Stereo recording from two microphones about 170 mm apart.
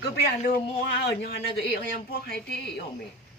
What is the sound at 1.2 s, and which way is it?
Speech, 70° left (ahead or behind).